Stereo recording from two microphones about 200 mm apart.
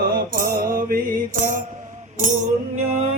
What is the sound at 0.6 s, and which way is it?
Mantra, 45° right (ahead or behind).